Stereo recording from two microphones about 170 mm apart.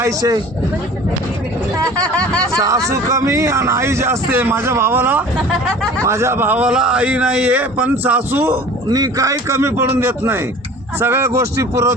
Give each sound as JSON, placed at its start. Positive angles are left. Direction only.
{"t": 0.0, "sound": "speech", "side_deg": -20}
{"t": 2.6, "sound": "a man's voice", "side_deg": -20}